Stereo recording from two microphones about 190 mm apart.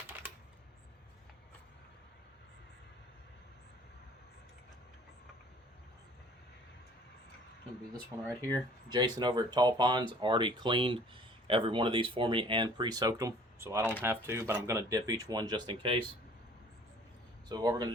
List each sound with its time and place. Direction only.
8.9 s speech: 20° right (ahead or behind)
17.5 s speech: 20° right (ahead or behind)